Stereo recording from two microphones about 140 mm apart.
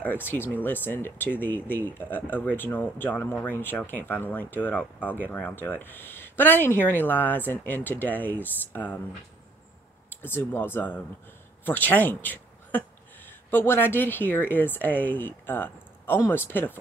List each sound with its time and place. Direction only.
0.0 s speech: 15° left (ahead or behind)
10.0 s speech: 15° left (ahead or behind)